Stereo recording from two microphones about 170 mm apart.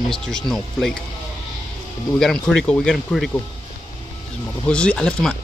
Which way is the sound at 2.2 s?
5° left (ahead or behind).